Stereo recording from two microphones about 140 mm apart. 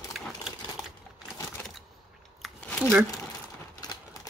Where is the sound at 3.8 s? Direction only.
25° left (ahead or behind).